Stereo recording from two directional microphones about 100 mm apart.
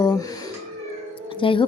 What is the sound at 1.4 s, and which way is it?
Speech, 60° left (ahead or behind).